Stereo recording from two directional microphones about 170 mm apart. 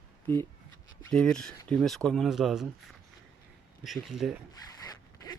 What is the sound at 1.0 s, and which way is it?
Speech, 5° left (ahead or behind).